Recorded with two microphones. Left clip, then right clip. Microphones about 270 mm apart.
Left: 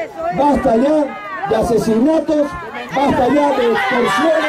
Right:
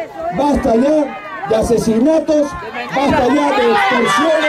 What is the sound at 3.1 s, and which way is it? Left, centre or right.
Speech, centre.